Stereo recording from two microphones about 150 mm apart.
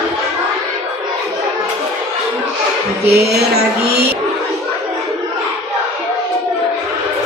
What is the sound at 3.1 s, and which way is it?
Music, 90° right.